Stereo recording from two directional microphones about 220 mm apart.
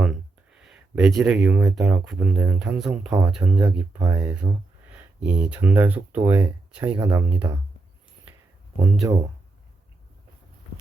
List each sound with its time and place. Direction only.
0.0 s speech: 5° right (ahead or behind)
3.6 s speech: 15° right (ahead or behind)
4.4 s speech: 5° right (ahead or behind)
8.8 s speech: 15° right (ahead or behind)